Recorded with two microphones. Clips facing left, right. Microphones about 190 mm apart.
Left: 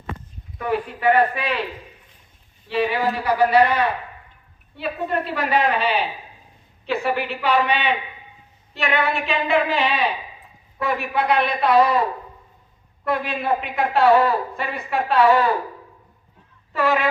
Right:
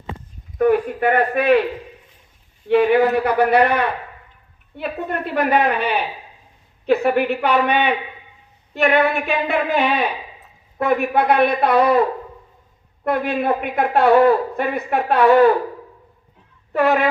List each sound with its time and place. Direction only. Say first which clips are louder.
0.6 s speech: right 6 dB; 50° right (ahead or behind)
2.6 s a woman's voice: right 7 dB; 55° right (ahead or behind)
13.1 s a woman's voice: right 3 dB; 55° right (ahead or behind)
16.7 s a woman's voice: right 4 dB; 55° right (ahead or behind)